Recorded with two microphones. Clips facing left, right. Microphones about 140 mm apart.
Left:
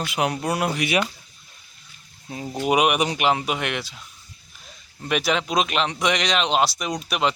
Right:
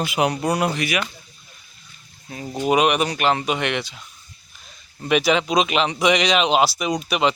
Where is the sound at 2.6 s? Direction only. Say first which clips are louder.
Right 2 dB; 10° left (ahead or behind).